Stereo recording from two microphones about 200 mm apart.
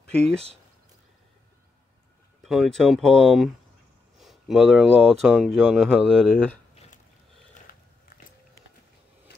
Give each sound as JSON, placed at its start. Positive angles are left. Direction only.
{"t": 0.1, "sound": "speech", "side_deg": 5}
{"t": 2.4, "sound": "speech", "side_deg": 0}
{"t": 6.7, "sound": "a sound", "side_deg": 30}